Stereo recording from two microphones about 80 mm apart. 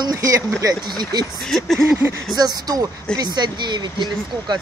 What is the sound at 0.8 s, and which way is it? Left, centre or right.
Speech, right.